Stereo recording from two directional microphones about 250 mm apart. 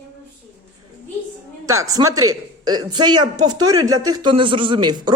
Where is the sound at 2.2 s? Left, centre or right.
Right.